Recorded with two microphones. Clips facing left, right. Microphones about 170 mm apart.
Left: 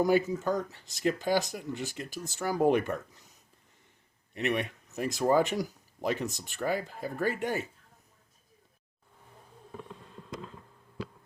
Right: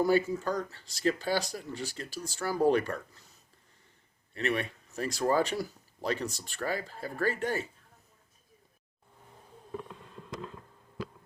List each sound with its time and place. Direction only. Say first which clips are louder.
0.0 s speech: left 1 dB; 20° left (ahead or behind)
4.4 s speech: left 1 dB; 15° left (ahead or behind)